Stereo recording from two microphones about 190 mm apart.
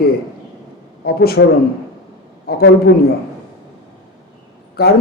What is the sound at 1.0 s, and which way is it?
Speech, 55° left (ahead or behind).